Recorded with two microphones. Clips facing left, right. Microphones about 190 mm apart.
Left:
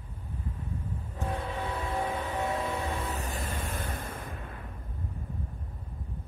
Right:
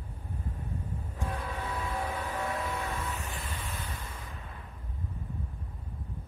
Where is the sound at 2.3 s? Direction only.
25° left (ahead or behind); by 4.3 s 50° left (ahead or behind).